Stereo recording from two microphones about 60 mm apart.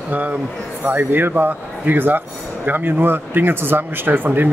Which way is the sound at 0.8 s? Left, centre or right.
Right.